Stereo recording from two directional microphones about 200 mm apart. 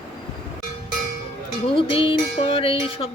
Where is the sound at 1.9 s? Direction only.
25° left (ahead or behind).